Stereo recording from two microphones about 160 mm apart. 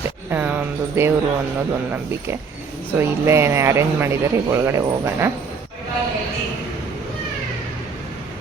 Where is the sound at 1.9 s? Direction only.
15° right (ahead or behind).